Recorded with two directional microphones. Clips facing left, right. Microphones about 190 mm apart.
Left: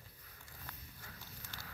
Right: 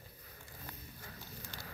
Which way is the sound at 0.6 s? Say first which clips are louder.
Right 4 dB; 15° right (ahead or behind).